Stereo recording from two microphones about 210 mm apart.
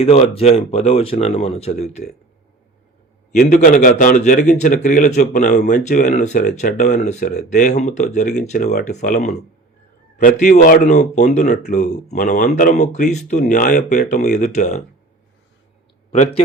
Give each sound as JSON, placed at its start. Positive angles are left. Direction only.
{"t": 0.0, "sound": "speech", "side_deg": 30}
{"t": 3.3, "sound": "speech", "side_deg": 45}
{"t": 16.1, "sound": "speech", "side_deg": 30}